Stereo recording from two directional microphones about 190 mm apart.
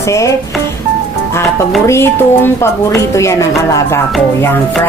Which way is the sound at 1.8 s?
15° left (ahead or behind).